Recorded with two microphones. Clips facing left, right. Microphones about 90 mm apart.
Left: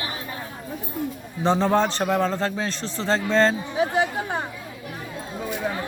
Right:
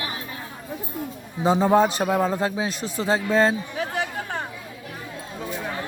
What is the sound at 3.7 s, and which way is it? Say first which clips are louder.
Chatter: left 5 dB; 20° left (ahead or behind).